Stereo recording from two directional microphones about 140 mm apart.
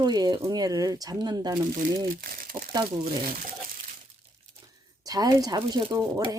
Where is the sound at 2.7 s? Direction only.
30° right (ahead or behind).